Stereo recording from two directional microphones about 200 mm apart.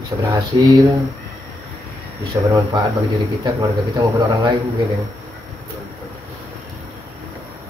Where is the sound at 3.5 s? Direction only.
20° right (ahead or behind).